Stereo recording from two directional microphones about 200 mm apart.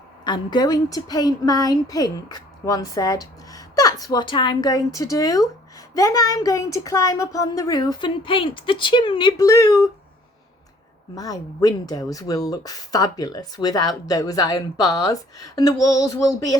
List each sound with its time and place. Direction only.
0.3 s a woman's voice: 20° left (ahead or behind)
11.1 s speech: 20° left (ahead or behind)